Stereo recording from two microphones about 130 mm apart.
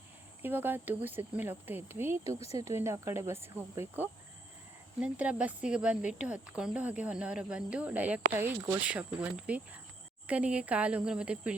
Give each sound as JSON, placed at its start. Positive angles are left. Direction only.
{"t": 0.4, "sound": "speech", "side_deg": -15}